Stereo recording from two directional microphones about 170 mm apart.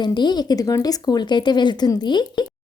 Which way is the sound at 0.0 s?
25° left (ahead or behind).